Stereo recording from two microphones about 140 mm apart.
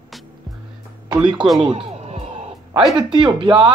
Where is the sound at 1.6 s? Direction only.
40° right (ahead or behind).